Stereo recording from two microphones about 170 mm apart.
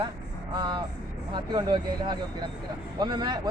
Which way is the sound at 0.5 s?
25° right (ahead or behind).